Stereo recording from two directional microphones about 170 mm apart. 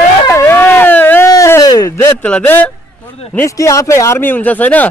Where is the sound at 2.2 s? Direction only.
10° left (ahead or behind).